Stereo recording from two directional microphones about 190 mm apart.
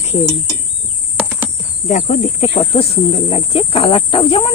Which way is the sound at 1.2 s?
10° right (ahead or behind).